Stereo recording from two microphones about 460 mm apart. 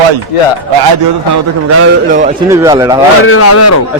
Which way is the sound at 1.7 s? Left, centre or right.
Right.